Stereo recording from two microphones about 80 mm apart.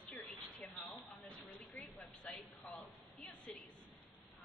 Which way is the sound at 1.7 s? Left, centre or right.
Centre.